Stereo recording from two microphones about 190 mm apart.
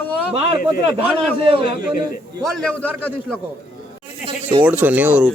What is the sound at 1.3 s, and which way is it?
Speech, 30° right (ahead or behind).